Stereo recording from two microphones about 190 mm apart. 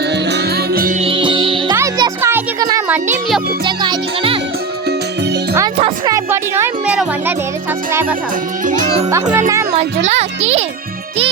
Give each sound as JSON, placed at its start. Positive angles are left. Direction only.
{"t": 0.1, "sound": "music", "side_deg": -60}
{"t": 0.9, "sound": "music", "side_deg": -30}
{"t": 1.7, "sound": "music", "side_deg": -15}
{"t": 5.7, "sound": "music", "side_deg": -30}
{"t": 6.1, "sound": "music", "side_deg": -15}
{"t": 8.6, "sound": "a child's voice", "side_deg": -40}
{"t": 9.0, "sound": "speech", "side_deg": -15}
{"t": 9.7, "sound": "speech", "side_deg": -35}